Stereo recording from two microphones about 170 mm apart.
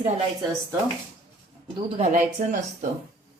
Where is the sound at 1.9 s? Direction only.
45° right (ahead or behind).